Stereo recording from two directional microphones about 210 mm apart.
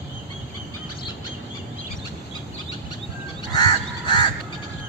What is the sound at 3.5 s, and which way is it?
Goose, 20° left (ahead or behind).